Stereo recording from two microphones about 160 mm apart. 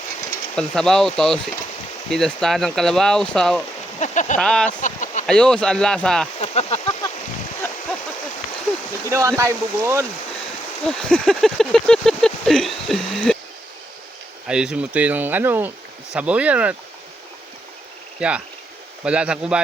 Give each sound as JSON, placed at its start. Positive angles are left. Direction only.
{"t": 0.5, "sound": "speech", "side_deg": 5}
{"t": 4.0, "sound": "speech", "side_deg": 50}
{"t": 4.4, "sound": "speech", "side_deg": 5}
{"t": 4.8, "sound": "a sound", "side_deg": 50}
{"t": 5.2, "sound": "speech", "side_deg": 5}
{"t": 6.4, "sound": "a sound", "side_deg": 40}
{"t": 9.0, "sound": "speech", "side_deg": -20}
{"t": 10.8, "sound": "a sound", "side_deg": 5}
{"t": 14.4, "sound": "speech", "side_deg": -5}
{"t": 18.2, "sound": "speech", "side_deg": -5}